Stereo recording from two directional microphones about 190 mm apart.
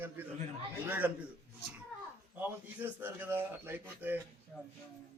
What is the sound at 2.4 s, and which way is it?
A man's voice, 10° right (ahead or behind).